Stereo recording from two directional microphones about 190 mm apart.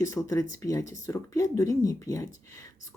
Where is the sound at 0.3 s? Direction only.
15° left (ahead or behind).